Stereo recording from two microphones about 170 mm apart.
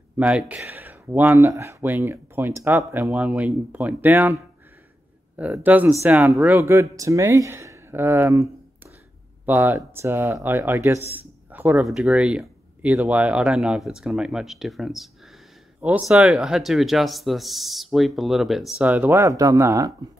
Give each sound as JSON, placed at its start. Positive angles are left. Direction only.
{"t": 0.2, "sound": "speech", "side_deg": -5}
{"t": 9.5, "sound": "speech", "side_deg": -10}